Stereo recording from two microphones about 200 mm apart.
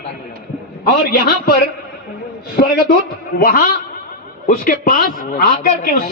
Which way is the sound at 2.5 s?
50° left (ahead or behind).